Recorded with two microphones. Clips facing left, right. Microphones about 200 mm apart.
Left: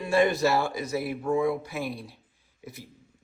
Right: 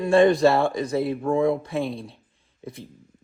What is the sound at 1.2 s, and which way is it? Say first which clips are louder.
Speech: right 3 dB; 55° right (ahead or behind).